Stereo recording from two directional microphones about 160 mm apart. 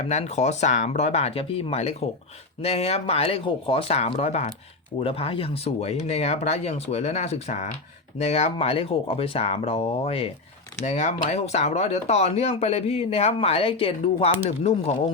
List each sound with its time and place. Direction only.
0.0 s speech: 45° left (ahead or behind)